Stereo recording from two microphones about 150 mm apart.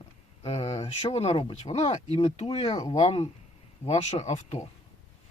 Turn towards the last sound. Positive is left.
turn(degrees=50)  # may be behind; listen again after turning